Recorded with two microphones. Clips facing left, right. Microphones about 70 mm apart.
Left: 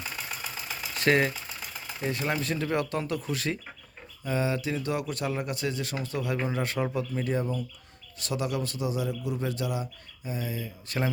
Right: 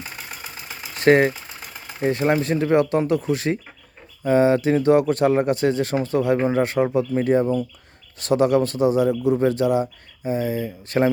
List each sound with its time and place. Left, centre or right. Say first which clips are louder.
0.0 s engine: right 1 dB; centre
1.0 s speech: right 9 dB; right
4.2 s speech: right 12 dB; right
8.2 s speech: right 13 dB; right